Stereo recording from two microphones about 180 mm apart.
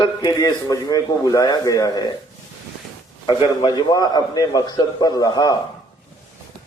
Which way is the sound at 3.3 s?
25° left (ahead or behind).